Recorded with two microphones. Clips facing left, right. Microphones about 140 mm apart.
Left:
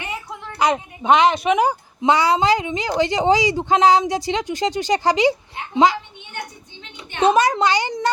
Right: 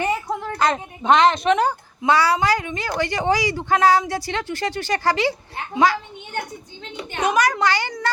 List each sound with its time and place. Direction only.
0.0 s a sound: 40° right (ahead or behind)
0.6 s a woman's voice: 10° left (ahead or behind)
7.2 s a woman's voice: 25° left (ahead or behind)